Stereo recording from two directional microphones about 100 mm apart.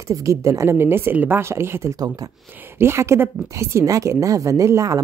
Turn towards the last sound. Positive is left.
turn(degrees=-35)  # may be behind; listen again after turning